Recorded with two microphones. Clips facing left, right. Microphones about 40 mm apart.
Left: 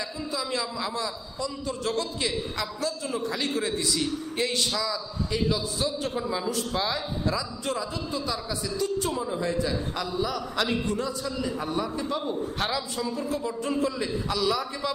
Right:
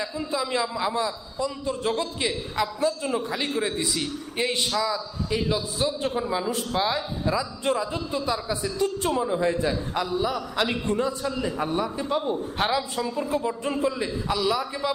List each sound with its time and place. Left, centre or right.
0.0 s a man's voice: right
3.2 s a man's voice: centre
6.5 s a man's voice: right
6.7 s a man's voice: centre
7.6 s a man's voice: right
9.0 s a man's voice: right
9.2 s a man's voice: right
10.7 s a man's voice: right; by 14.9 s centre